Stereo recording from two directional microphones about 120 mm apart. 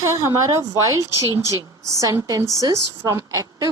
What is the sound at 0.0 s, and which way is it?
A woman's voice, 25° right (ahead or behind).